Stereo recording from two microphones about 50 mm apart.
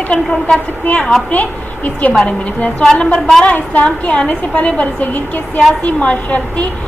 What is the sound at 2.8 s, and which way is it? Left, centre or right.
A woman's voice, centre.